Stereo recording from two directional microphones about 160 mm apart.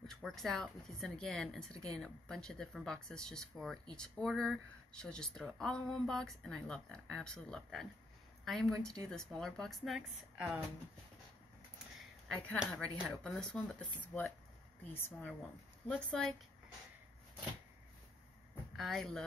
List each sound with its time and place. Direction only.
0.0 s speech: 5° left (ahead or behind)
8.7 s speech: 20° right (ahead or behind)
9.4 s speech: centre (ahead or behind)
12.0 s a woman's voice: centre (ahead or behind)
18.8 s speech: centre (ahead or behind)